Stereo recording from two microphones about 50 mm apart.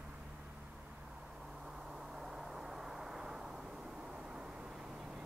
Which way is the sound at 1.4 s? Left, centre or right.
Centre.